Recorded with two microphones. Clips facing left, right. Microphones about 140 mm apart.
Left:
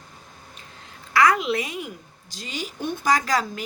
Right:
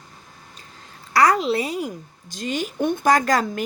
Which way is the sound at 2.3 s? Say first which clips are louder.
Right 7 dB; 50° right (ahead or behind).